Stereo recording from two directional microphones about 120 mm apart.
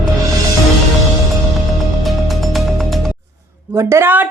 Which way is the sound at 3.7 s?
20° right (ahead or behind).